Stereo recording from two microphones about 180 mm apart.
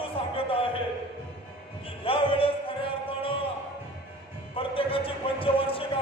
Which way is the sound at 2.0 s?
30° left (ahead or behind).